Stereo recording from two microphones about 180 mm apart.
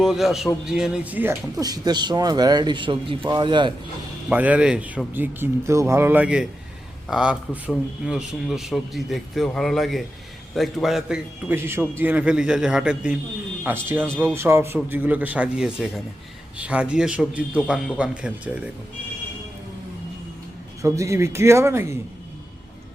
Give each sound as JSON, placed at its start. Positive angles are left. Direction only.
{"t": 0.0, "sound": "a man's voice", "side_deg": 0}
{"t": 4.3, "sound": "a man's voice", "side_deg": -10}
{"t": 20.8, "sound": "speech", "side_deg": -15}